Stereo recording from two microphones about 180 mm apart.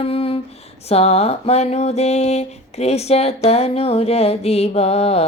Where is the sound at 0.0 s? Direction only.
30° left (ahead or behind).